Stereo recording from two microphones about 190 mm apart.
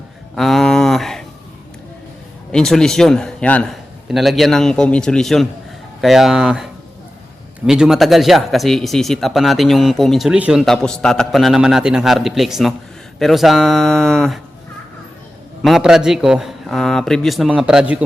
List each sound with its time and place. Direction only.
0.3 s a sound: centre (ahead or behind)
2.5 s speech: 5° left (ahead or behind)
7.7 s speech: centre (ahead or behind)
15.6 s speech: centre (ahead or behind)